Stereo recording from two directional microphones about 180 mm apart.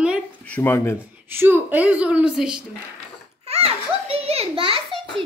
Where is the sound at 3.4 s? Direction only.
35° right (ahead or behind).